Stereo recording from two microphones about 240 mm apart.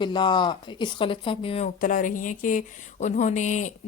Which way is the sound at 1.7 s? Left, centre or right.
Left.